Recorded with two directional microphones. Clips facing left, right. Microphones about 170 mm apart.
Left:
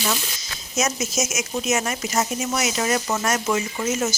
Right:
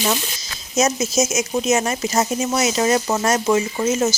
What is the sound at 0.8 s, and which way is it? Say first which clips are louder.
Speech: right 6 dB; 30° right (ahead or behind).